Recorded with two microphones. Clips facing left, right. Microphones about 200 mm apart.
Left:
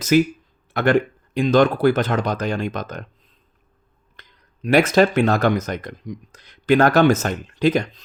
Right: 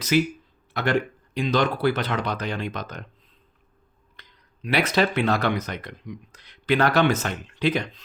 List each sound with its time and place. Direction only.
0.1 s speech: 45° left (ahead or behind)
4.2 s speech: 45° left (ahead or behind)